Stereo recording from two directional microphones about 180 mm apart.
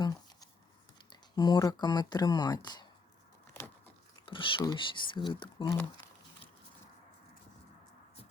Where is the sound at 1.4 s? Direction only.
20° left (ahead or behind).